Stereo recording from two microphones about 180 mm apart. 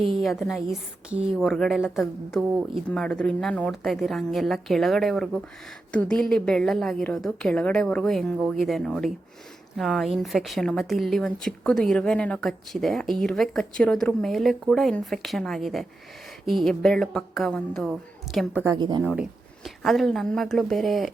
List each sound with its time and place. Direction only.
0.0 s a woman's voice: centre (ahead or behind)
18.6 s a woman's voice: 20° right (ahead or behind)
19.0 s a woman's voice: 5° right (ahead or behind)